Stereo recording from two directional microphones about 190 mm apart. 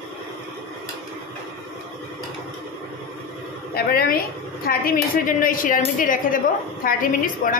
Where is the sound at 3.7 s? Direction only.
50° left (ahead or behind).